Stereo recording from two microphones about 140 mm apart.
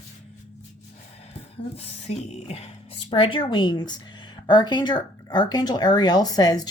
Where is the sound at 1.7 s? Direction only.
45° left (ahead or behind).